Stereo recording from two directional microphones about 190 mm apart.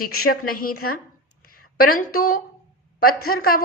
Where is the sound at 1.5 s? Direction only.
50° left (ahead or behind).